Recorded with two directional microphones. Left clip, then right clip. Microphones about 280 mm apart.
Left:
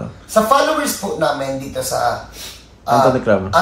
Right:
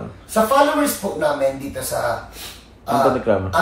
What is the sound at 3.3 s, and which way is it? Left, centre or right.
Speech, left.